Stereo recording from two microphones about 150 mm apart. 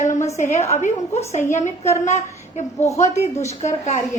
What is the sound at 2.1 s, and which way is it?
Speech, 50° left (ahead or behind).